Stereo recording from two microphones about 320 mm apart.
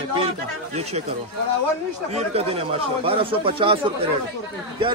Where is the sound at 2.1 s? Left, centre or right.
Centre.